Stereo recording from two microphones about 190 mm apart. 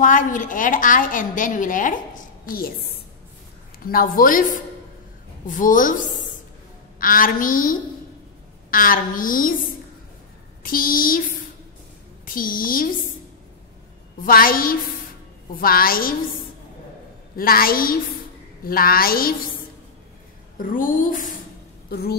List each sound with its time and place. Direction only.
0.0 s a woman's voice: 45° left (ahead or behind)
7.0 s a woman's voice: 45° left (ahead or behind)
10.6 s a woman's voice: 50° left (ahead or behind)
12.3 s a woman's voice: 50° left (ahead or behind)
14.2 s a woman's voice: 50° left (ahead or behind)
17.4 s a woman's voice: 50° left (ahead or behind)
20.5 s a woman's voice: 45° left (ahead or behind)
21.8 s a woman's voice: 55° left (ahead or behind)